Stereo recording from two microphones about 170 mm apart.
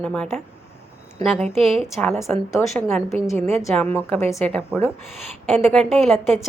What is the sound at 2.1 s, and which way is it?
Speech, 15° left (ahead or behind).